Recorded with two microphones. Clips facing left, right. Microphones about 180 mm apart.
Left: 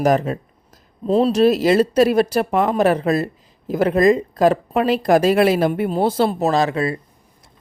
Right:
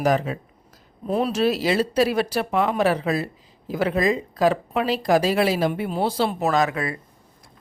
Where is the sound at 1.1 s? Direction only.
35° left (ahead or behind); by 6.3 s 50° left (ahead or behind).